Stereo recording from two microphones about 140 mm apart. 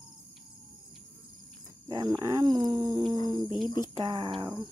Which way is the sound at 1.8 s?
30° right (ahead or behind).